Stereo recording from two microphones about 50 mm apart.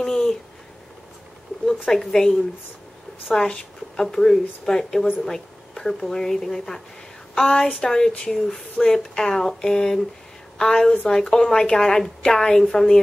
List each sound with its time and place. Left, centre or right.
0.0 s a sound: centre
1.9 s speech: centre
3.3 s speech: centre